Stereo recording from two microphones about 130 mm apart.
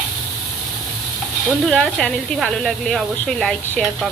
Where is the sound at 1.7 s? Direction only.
5° left (ahead or behind).